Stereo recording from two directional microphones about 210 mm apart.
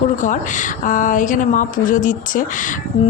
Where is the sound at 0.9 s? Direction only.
40° left (ahead or behind).